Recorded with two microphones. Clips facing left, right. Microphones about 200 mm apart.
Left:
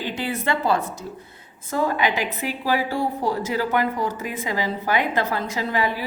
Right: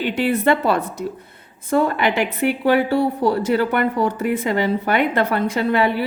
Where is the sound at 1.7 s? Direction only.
65° right (ahead or behind).